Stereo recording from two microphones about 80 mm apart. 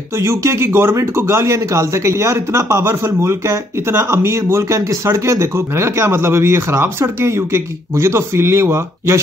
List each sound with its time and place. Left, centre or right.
0.2 s speech: right